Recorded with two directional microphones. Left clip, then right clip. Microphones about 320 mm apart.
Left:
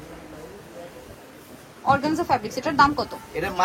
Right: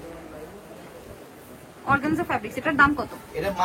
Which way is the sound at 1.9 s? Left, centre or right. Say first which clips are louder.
Left 3 dB; centre.